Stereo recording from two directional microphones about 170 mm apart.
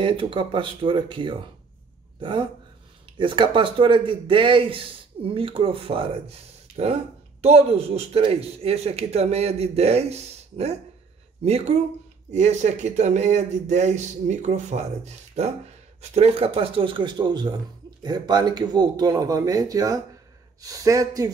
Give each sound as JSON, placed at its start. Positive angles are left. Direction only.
{"t": 0.0, "sound": "speech", "side_deg": -30}